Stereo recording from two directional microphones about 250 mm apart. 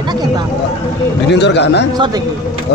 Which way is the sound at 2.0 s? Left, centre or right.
Centre.